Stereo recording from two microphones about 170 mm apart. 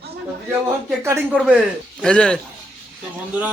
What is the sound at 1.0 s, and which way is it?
Speech, 15° right (ahead or behind).